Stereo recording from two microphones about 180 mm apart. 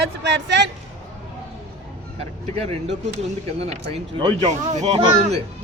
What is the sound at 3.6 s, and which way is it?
Speech, 30° right (ahead or behind).